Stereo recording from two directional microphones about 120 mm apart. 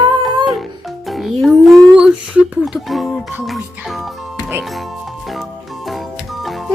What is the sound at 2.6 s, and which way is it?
Speech, centre (ahead or behind).